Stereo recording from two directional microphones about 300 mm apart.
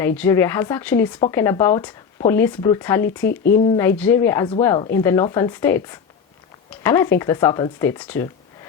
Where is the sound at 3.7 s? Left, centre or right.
Centre.